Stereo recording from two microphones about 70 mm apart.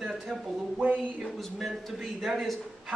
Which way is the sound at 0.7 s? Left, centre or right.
Right.